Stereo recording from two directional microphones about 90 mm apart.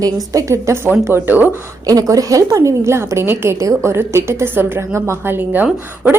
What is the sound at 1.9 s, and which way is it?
A woman's voice, 40° right (ahead or behind).